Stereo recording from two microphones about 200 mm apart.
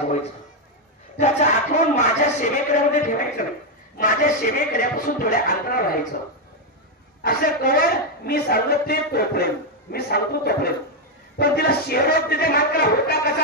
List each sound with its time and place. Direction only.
1.1 s a man's voice: 35° left (ahead or behind)
7.2 s a man's voice: 50° left (ahead or behind)